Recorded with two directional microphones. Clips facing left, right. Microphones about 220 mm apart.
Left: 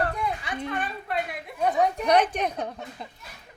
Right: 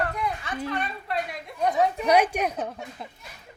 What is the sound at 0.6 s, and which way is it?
A woman's voice, centre (ahead or behind).